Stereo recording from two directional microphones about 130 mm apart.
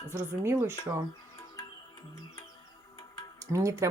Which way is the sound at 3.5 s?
25° right (ahead or behind).